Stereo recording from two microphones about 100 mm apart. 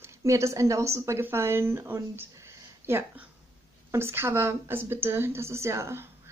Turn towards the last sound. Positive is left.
turn(degrees=-30)  # may be behind; listen again after turning